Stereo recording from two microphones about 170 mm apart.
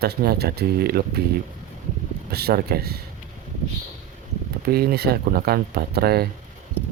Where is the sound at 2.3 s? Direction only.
70° right (ahead or behind).